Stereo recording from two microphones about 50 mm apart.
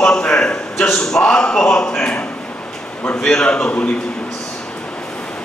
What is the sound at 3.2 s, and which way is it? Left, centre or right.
Speech, centre.